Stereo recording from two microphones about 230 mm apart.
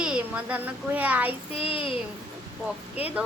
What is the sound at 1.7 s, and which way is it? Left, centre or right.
Speech, left.